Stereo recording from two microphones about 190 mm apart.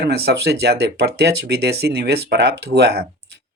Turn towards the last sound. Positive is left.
turn(degrees=-60)  # may be behind; listen again after turning